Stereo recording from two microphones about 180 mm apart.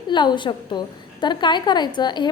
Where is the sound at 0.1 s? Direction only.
25° left (ahead or behind).